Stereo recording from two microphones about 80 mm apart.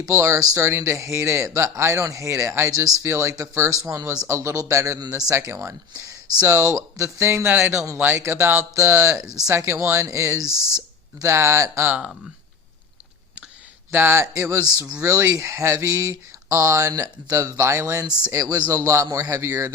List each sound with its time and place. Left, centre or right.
0.0 s speech: right
0.6 s speech: right
3.0 s speech: right
3.7 s speech: right
4.9 s speech: right
5.3 s speech: right
9.2 s speech: right
10.5 s speech: left
11.2 s speech: right
13.9 s speech: right
14.6 s speech: right
15.0 s speech: right
17.3 s speech: right